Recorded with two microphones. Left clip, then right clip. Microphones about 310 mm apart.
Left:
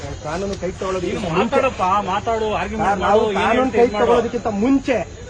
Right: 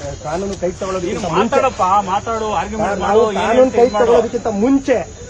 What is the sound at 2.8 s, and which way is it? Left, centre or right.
Speech, centre.